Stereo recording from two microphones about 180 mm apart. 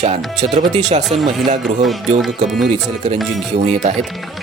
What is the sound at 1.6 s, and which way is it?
Speech, centre (ahead or behind).